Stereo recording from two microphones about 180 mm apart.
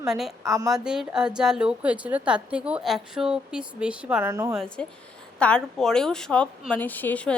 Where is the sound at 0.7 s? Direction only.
5° right (ahead or behind).